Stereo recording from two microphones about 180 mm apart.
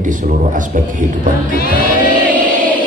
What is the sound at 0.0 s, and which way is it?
A man's voice, 45° right (ahead or behind).